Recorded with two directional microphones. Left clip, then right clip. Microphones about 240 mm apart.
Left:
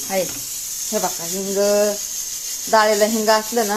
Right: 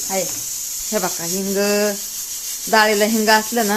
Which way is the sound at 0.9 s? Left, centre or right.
Right.